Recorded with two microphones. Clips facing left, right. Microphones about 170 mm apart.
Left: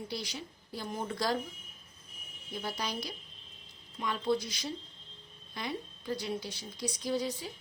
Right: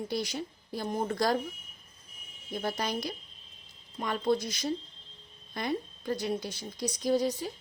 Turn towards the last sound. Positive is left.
turn(degrees=-40)  # may be behind; listen again after turning